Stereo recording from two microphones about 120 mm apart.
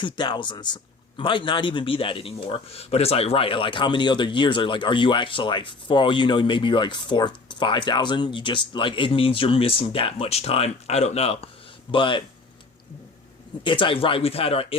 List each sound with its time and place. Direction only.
0.0 s speech: 40° left (ahead or behind); by 11.4 s 55° left (ahead or behind)
11.9 s speech: 45° left (ahead or behind)
13.7 s speech: 45° left (ahead or behind)